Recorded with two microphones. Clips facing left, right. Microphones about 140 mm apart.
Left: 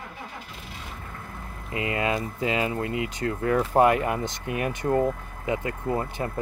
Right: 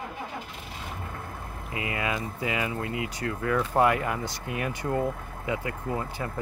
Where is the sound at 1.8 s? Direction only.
30° left (ahead or behind).